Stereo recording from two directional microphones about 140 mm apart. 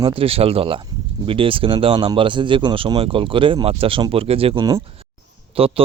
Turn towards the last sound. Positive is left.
turn(degrees=-40)  # may be behind; listen again after turning